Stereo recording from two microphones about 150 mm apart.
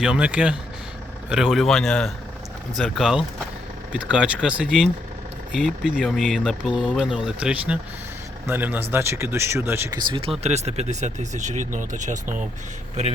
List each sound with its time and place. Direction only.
0.0 s speech: 5° right (ahead or behind)
10.0 s speech: 35° right (ahead or behind)
10.4 s speech: 45° right (ahead or behind)